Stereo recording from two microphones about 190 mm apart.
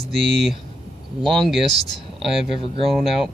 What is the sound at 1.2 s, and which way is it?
Speech, centre (ahead or behind).